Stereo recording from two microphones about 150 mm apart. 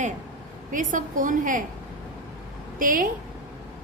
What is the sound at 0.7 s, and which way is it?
Speech, 60° right (ahead or behind).